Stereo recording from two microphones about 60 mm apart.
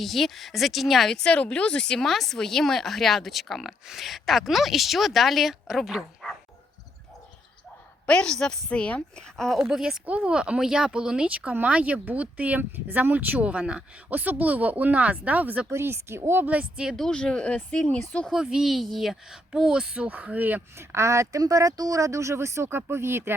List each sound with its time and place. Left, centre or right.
0.0 s speech: centre
1.1 s speech: centre
8.0 s speech: centre
9.6 s speech: centre
10.1 s speech: centre
14.1 s speech: right
15.7 s speech: right
16.5 s speech: centre
16.9 s speech: centre
17.2 s speech: centre
18.3 s speech: centre; by 20.6 s right
20.7 s speech: right